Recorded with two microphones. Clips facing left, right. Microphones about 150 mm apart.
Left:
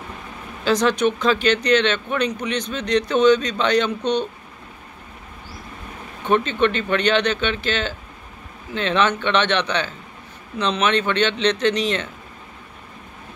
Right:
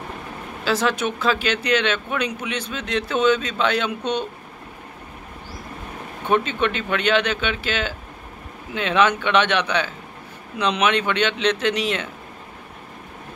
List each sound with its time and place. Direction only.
0.7 s speech: 5° right (ahead or behind)
6.2 s speech: 10° right (ahead or behind)